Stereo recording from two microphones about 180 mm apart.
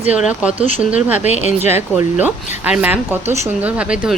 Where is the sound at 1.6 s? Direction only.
15° right (ahead or behind).